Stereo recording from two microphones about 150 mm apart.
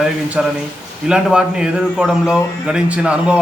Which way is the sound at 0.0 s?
5° right (ahead or behind).